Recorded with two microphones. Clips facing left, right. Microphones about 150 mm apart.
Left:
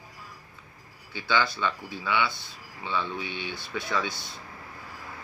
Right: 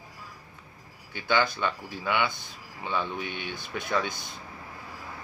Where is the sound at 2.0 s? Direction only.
15° right (ahead or behind).